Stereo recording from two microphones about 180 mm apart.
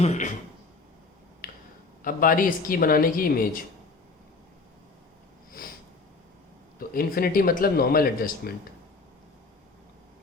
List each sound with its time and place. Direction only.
0.0 s speech: 40° left (ahead or behind)
1.4 s finger snapping: 50° left (ahead or behind)
2.0 s a woman's voice: 50° left (ahead or behind)
6.7 s a man's voice: 55° left (ahead or behind)